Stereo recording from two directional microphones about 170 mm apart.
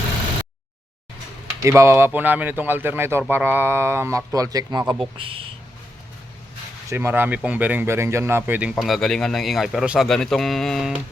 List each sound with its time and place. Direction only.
1.6 s a man's voice: 15° right (ahead or behind)
5.1 s speech: 30° right (ahead or behind)
6.9 s speech: 15° right (ahead or behind)
8.7 s a man's voice: centre (ahead or behind)